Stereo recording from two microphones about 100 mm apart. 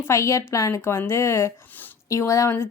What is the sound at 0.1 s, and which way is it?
A woman's voice, 30° left (ahead or behind).